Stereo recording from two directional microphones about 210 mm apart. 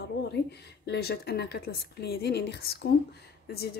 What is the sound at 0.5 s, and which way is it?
Speech, 50° left (ahead or behind).